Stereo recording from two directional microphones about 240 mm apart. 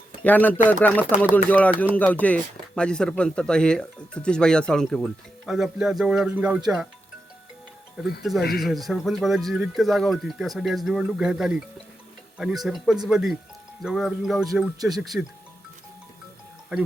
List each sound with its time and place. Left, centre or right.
0.3 s speech: centre
8.2 s speech: centre